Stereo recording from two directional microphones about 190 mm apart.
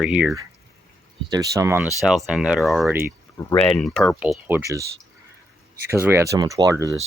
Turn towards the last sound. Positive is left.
turn(degrees=-15)  # may be behind; listen again after turning